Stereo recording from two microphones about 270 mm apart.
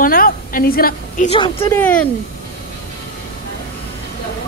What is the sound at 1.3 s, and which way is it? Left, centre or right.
Speech, centre.